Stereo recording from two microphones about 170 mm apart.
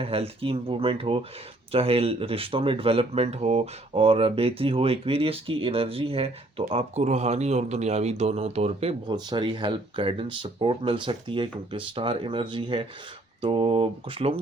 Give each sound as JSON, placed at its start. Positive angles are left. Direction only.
{"t": 0.0, "sound": "speech", "side_deg": -35}